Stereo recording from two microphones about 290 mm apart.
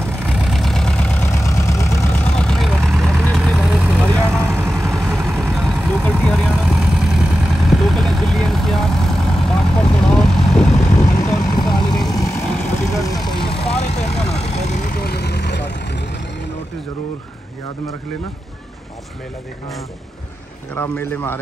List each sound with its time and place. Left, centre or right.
0.4 s vehicle: centre
10.9 s vehicle: left
11.3 s vehicle: centre; by 16.2 s left
20.7 s a sound: centre